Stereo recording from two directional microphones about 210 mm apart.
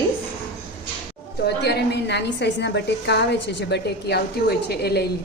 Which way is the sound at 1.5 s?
50° left (ahead or behind).